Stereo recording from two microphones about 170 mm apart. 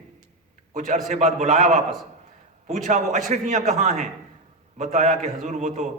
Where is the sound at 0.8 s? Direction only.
50° right (ahead or behind).